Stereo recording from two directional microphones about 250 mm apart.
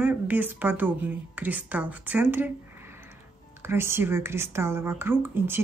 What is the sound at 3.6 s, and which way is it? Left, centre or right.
Speech, centre.